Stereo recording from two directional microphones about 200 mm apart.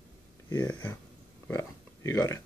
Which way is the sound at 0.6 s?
10° left (ahead or behind).